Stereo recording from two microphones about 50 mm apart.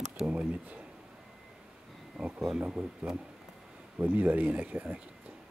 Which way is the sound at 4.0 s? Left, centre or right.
Right.